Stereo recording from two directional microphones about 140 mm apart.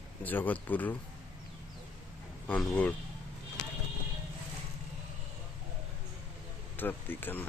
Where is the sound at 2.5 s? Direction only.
10° left (ahead or behind).